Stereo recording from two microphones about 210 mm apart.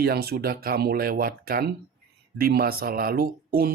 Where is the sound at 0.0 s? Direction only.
50° right (ahead or behind).